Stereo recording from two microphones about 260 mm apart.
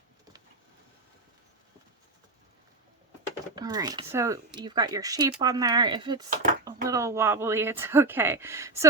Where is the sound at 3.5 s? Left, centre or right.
Centre.